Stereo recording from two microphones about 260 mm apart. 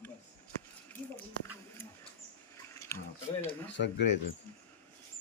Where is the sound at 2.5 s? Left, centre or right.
Centre.